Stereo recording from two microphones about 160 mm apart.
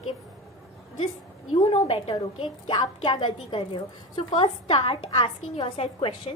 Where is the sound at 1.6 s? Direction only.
35° left (ahead or behind).